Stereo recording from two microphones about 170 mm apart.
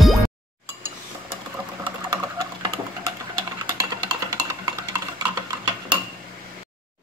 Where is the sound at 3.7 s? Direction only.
20° right (ahead or behind).